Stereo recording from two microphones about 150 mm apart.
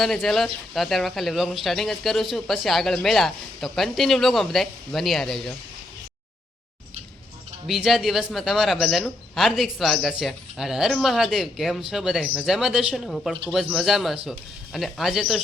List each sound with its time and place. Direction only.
0.0 s speech: centre (ahead or behind)
7.7 s speech: centre (ahead or behind)